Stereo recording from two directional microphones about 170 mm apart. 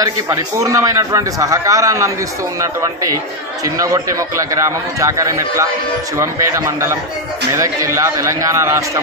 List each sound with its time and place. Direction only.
0.0 s a man's voice: 20° right (ahead or behind)